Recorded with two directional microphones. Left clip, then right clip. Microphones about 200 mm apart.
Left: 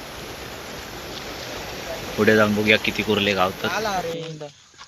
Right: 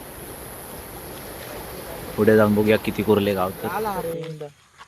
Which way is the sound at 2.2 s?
15° right (ahead or behind).